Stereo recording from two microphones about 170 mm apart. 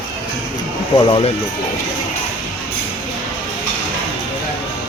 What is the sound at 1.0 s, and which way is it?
Speech, 30° left (ahead or behind).